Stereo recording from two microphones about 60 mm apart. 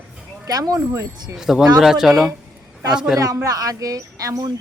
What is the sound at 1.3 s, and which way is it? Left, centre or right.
Speech, centre.